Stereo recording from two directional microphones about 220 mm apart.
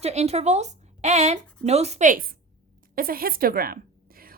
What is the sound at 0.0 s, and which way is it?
A woman's voice, 30° right (ahead or behind).